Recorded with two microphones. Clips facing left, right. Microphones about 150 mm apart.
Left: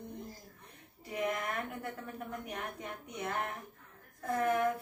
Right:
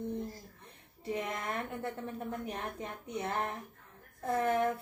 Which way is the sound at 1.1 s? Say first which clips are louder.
Left 2 dB; 25° right (ahead or behind).